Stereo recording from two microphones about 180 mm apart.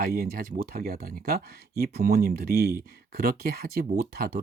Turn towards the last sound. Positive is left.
turn(degrees=-55)  # may be behind; listen again after turning